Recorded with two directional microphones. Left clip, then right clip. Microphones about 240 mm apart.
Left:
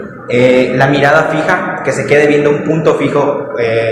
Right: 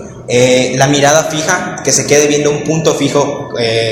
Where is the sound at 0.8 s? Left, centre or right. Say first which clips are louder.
Even; centre.